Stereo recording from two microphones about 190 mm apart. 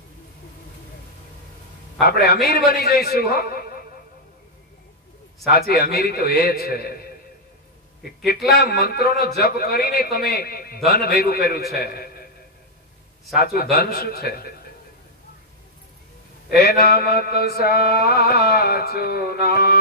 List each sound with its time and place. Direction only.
2.0 s mantra: 55° left (ahead or behind)
2.7 s a man's voice: 55° left (ahead or behind)
5.5 s mantra: 55° left (ahead or behind)
8.3 s mantra: 55° left (ahead or behind)
13.3 s mantra: 55° left (ahead or behind)
16.4 s mantra: 55° left (ahead or behind)